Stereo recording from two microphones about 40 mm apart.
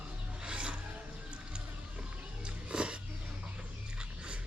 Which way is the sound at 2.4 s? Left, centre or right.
Right.